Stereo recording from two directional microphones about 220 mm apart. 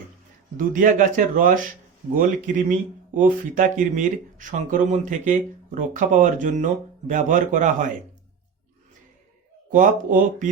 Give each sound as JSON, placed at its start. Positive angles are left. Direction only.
{"t": 0.5, "sound": "speech", "side_deg": -35}
{"t": 9.7, "sound": "speech", "side_deg": -35}